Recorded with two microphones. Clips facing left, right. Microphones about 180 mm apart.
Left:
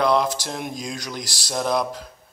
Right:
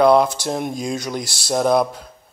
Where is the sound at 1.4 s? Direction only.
55° right (ahead or behind).